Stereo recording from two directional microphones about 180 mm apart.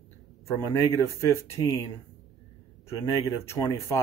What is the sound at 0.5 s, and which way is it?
Speech, 15° left (ahead or behind).